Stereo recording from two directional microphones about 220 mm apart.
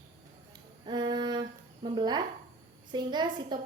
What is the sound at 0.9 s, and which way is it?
A woman's voice, 20° right (ahead or behind).